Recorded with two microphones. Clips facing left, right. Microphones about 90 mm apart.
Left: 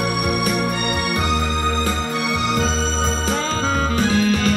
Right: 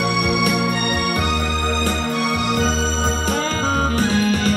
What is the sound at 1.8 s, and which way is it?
Music, 45° right (ahead or behind).